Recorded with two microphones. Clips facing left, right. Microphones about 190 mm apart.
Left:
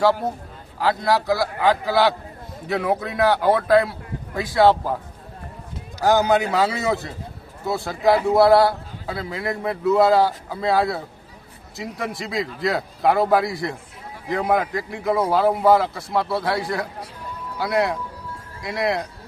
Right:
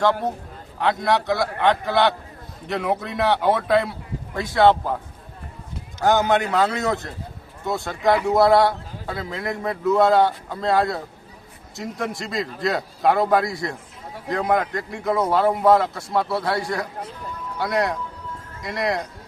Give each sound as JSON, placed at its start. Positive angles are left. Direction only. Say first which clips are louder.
{"t": 0.8, "sound": "a man's voice", "louder": "even", "side_deg": 0}
{"t": 6.0, "sound": "a man's voice", "louder": "left 1 dB", "side_deg": 0}